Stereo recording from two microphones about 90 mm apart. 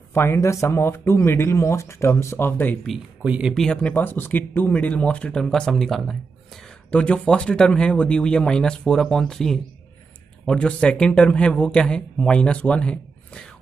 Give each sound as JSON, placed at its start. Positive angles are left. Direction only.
{"t": 0.1, "sound": "speech", "side_deg": 30}
{"t": 2.8, "sound": "speech", "side_deg": 0}
{"t": 3.3, "sound": "speech", "side_deg": -10}
{"t": 3.5, "sound": "speech", "side_deg": 10}
{"t": 6.9, "sound": "speech", "side_deg": 15}